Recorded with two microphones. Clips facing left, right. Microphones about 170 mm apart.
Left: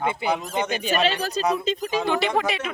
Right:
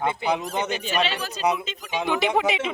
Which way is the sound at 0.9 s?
40° left (ahead or behind).